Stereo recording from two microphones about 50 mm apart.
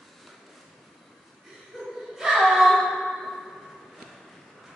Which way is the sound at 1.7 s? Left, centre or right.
Centre.